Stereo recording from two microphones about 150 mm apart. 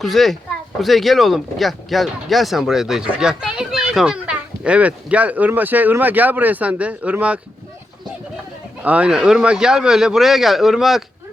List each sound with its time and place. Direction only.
0.0 s speech: centre (ahead or behind)
8.8 s speech: 10° right (ahead or behind)